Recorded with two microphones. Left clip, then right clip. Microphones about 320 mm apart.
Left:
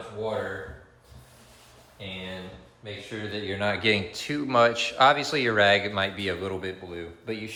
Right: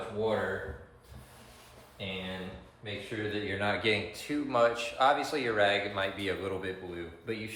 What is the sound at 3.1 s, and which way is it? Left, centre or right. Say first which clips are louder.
Speech: left 2 dB; centre.